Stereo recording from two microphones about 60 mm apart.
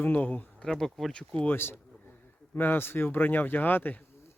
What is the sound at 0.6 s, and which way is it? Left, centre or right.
Speech, centre.